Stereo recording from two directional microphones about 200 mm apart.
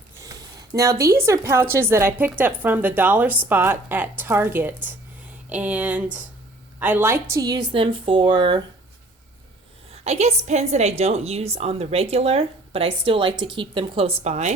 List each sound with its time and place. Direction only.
0.2 s a sound: 15° right (ahead or behind)
1.0 s a woman's voice: 15° right (ahead or behind)
10.0 s a woman's voice: 35° right (ahead or behind)